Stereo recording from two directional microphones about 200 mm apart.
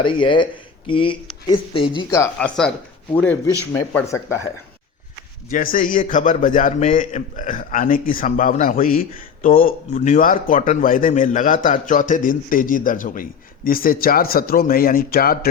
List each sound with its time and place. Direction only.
0.0 s speech: 25° left (ahead or behind)
5.5 s a man's voice: 45° left (ahead or behind)